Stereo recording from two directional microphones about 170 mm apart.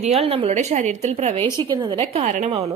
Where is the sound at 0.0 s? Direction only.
35° right (ahead or behind).